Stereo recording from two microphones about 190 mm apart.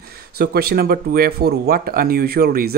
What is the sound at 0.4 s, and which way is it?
Speech, 55° right (ahead or behind).